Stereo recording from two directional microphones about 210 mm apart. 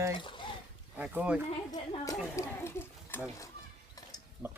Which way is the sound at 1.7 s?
15° left (ahead or behind).